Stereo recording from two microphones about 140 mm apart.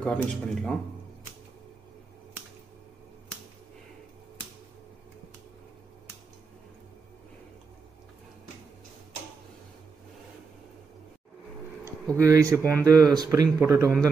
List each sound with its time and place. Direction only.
0.0 s speech: 5° left (ahead or behind)
11.8 s speech: 20° right (ahead or behind)